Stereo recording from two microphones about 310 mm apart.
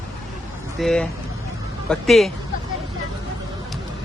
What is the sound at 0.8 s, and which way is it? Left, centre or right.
A man's voice, centre.